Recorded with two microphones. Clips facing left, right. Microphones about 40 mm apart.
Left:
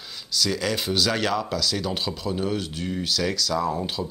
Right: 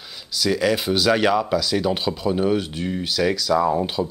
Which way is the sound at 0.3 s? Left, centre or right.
Centre.